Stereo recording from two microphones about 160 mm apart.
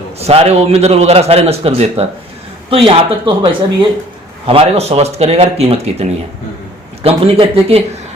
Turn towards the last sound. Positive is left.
turn(degrees=-40)  # may be behind; listen again after turning